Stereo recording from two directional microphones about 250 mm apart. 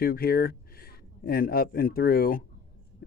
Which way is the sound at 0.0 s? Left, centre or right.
Left.